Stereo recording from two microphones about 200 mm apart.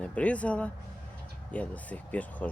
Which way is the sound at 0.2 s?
5° left (ahead or behind).